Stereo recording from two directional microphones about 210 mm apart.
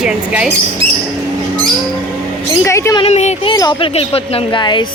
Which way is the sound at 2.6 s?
15° left (ahead or behind).